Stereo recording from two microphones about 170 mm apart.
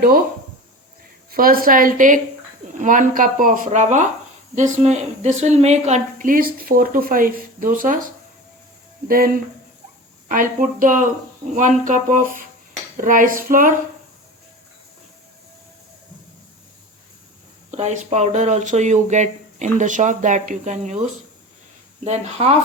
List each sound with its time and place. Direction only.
1.3 s a woman's voice: 60° right (ahead or behind)
17.7 s a woman's voice: 45° right (ahead or behind)
22.0 s speech: 40° right (ahead or behind)